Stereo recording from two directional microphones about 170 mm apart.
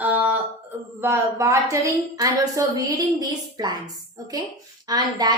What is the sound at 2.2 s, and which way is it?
A woman's voice, 20° right (ahead or behind).